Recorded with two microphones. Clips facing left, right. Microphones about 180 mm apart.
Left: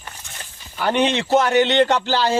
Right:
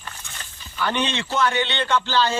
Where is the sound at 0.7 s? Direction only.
40° left (ahead or behind).